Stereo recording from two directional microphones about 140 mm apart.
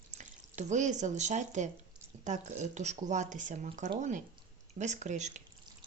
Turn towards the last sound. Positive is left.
turn(degrees=-60)  # may be behind; listen again after turning